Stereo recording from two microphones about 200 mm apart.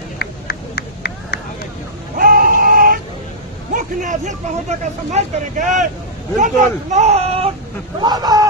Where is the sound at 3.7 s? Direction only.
40° right (ahead or behind).